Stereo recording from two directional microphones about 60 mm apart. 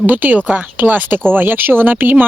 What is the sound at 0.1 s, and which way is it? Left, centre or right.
Speech, right.